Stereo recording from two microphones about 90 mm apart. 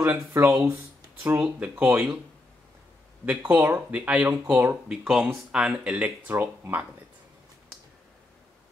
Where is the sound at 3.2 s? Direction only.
20° right (ahead or behind).